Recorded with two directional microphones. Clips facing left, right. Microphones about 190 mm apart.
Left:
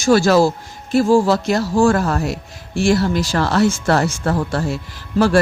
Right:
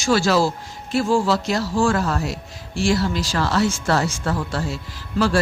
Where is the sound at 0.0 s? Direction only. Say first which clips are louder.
Left 5 dB; 45° left (ahead or behind).